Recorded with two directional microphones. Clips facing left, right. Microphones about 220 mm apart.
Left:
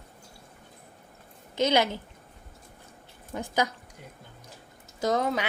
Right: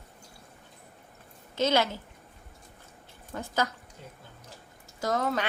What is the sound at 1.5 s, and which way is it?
Speech, 15° left (ahead or behind).